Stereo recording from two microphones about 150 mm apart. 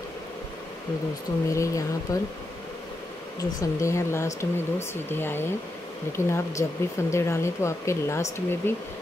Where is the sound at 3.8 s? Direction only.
20° left (ahead or behind).